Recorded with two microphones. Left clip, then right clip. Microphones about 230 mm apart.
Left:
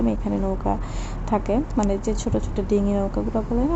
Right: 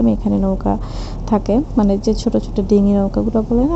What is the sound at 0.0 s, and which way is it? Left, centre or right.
A woman's voice, centre.